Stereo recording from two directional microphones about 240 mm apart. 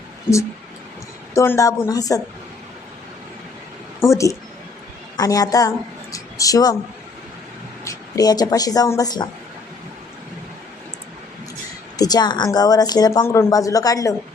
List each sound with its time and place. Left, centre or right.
1.3 s a woman's voice: centre
4.0 s a woman's voice: centre
7.9 s speech: centre
11.9 s a woman's voice: centre